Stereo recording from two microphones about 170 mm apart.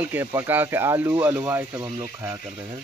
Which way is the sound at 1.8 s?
25° right (ahead or behind).